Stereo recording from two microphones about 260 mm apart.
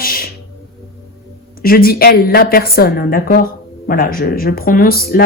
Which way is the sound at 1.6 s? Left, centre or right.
Left.